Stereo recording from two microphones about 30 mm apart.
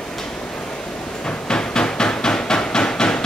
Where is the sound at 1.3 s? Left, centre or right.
Left.